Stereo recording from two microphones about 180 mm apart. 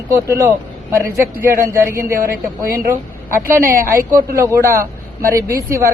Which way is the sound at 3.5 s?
15° right (ahead or behind).